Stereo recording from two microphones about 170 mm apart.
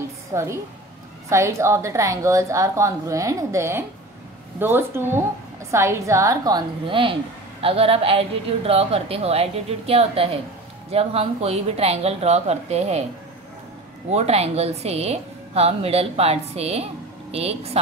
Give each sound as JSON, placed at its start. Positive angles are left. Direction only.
{"t": 0.3, "sound": "a woman's voice", "side_deg": -15}
{"t": 14.1, "sound": "a woman's voice", "side_deg": -40}